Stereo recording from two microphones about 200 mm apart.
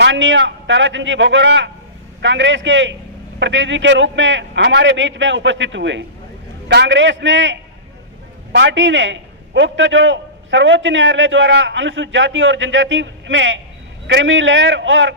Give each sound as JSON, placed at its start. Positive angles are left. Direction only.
{"t": 0.0, "sound": "a man's voice", "side_deg": -65}